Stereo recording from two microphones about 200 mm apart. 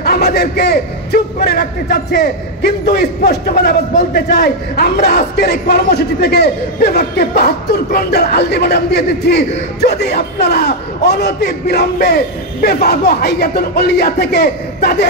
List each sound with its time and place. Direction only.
0.0 s a man's voice: 50° left (ahead or behind)